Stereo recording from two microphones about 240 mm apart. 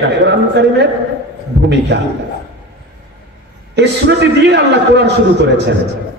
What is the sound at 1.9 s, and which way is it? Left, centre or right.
Speech, right.